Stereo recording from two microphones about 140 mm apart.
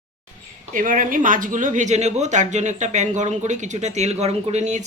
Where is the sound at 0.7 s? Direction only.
75° right (ahead or behind).